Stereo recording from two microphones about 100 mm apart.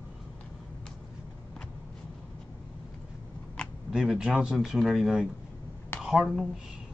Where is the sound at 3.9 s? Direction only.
5° right (ahead or behind).